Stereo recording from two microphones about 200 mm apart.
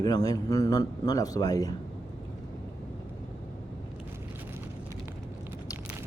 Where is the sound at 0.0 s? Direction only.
20° left (ahead or behind).